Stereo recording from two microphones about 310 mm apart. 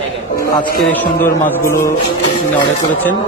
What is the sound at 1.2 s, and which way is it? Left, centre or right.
Speech, centre.